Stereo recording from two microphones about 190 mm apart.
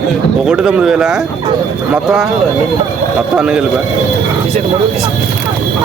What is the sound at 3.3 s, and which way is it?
Speech, 5° right (ahead or behind).